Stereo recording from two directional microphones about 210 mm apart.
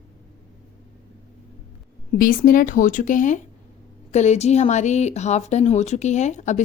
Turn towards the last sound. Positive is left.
turn(degrees=35)  # may be behind; listen again after turning